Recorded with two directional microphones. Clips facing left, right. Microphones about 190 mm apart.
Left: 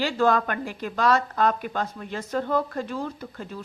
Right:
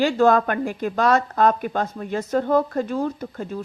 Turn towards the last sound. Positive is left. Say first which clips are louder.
# right 6 dB
turn(degrees=-45)  # may be behind; listen again after turning